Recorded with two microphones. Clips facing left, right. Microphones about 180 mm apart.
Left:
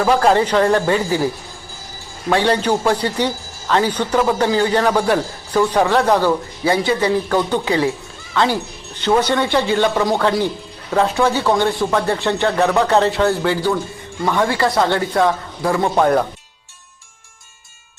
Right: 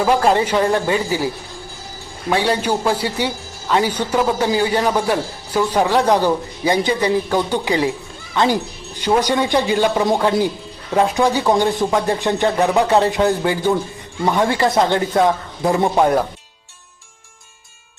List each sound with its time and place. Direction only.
0.0 s a man's voice: 5° right (ahead or behind)
2.3 s a man's voice: 10° right (ahead or behind)